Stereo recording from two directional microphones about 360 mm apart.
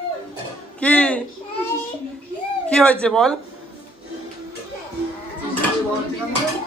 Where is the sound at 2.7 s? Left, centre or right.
Centre.